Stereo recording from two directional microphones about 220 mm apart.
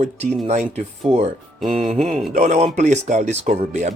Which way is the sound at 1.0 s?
30° right (ahead or behind).